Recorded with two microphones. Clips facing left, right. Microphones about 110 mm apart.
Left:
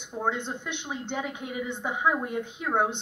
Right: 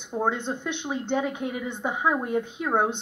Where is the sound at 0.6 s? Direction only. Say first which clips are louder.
Right 6 dB; 20° right (ahead or behind).